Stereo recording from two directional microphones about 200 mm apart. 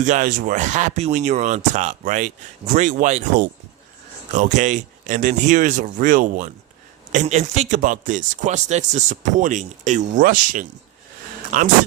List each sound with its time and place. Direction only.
0.0 s speech: 40° right (ahead or behind)